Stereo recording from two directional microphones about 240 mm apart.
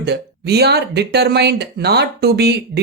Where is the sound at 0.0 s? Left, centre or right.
Right.